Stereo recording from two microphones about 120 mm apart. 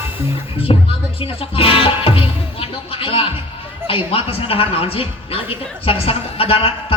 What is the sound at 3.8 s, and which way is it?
A woman's voice, 50° left (ahead or behind).